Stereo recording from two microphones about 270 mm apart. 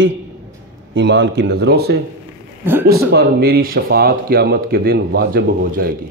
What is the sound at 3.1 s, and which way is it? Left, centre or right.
A man's voice, right.